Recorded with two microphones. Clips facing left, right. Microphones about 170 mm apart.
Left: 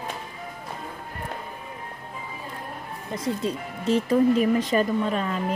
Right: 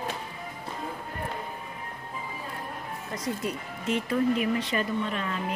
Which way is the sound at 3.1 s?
25° left (ahead or behind).